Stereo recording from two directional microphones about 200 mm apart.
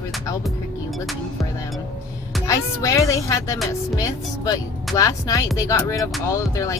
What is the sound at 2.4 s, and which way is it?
Speech, 15° left (ahead or behind).